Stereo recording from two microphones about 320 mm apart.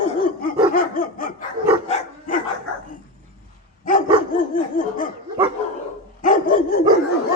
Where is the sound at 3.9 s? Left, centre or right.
Left.